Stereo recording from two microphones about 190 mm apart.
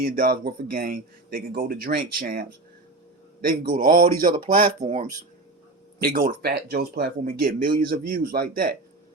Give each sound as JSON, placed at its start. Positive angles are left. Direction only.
{"t": 0.0, "sound": "speech", "side_deg": -50}
{"t": 6.0, "sound": "speech", "side_deg": -55}